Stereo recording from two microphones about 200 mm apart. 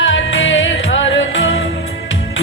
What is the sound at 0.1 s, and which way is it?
Music, 70° left (ahead or behind).